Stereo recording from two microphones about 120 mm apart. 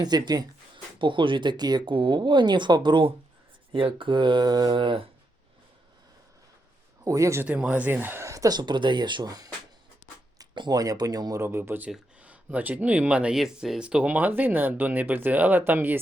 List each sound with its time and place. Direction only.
0.0 s speech: 35° right (ahead or behind)
7.0 s speech: 25° right (ahead or behind)
7.4 s speech: 15° right (ahead or behind)